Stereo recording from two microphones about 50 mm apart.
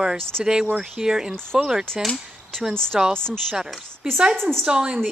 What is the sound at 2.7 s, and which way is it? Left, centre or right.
Speech, centre.